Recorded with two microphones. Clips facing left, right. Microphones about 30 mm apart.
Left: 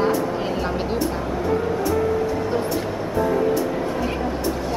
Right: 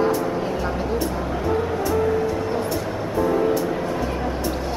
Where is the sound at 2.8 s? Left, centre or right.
Centre.